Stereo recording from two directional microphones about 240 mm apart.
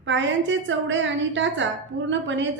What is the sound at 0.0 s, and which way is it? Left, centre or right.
A woman's voice, right.